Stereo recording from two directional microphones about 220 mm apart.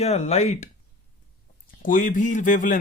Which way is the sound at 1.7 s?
35° left (ahead or behind).